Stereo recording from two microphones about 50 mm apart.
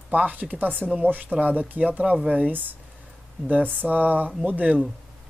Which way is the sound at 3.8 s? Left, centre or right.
Right.